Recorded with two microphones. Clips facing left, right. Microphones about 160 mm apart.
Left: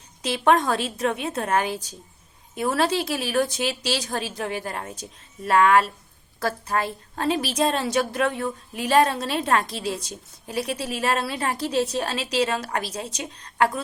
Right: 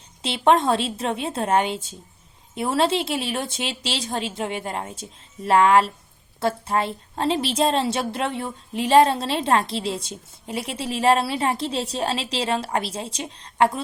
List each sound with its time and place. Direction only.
0.2 s a woman's voice: 25° right (ahead or behind)